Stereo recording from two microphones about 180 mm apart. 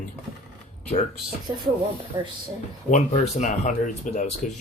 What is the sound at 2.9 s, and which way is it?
Speech, 40° left (ahead or behind).